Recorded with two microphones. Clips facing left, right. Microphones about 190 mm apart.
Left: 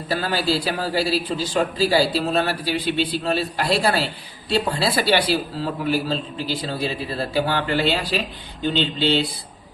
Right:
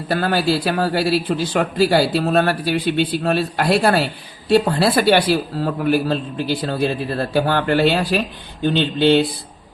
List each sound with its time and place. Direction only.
0.1 s a man's voice: 55° right (ahead or behind)